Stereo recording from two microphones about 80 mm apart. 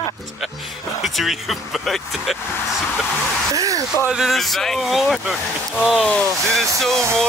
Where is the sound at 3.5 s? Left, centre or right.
Right.